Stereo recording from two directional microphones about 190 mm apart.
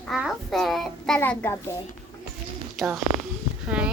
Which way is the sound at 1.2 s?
10° left (ahead or behind).